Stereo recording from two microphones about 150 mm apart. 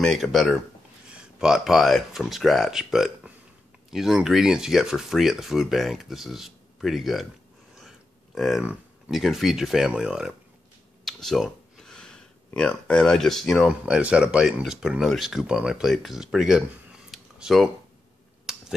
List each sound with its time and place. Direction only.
0.0 s speech: centre (ahead or behind)
8.4 s speech: centre (ahead or behind)
17.1 s a sound: centre (ahead or behind)
18.5 s finger snapping: centre (ahead or behind)